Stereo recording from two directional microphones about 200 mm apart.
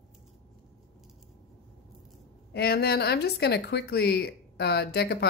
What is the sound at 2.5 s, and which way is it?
A woman's voice, 55° left (ahead or behind).